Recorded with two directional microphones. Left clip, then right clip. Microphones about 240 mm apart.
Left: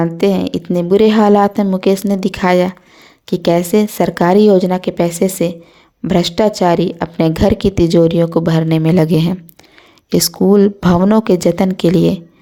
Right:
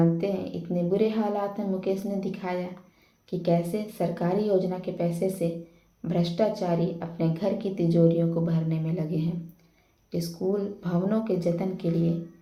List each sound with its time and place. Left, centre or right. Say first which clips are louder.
0.0 s a woman's voice: left 12 dB; left